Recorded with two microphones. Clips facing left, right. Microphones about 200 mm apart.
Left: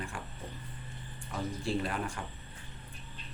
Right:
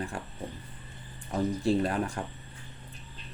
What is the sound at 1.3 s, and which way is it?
Speech, 40° right (ahead or behind).